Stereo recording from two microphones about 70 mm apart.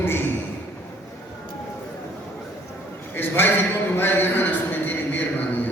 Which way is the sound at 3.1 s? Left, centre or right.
Left.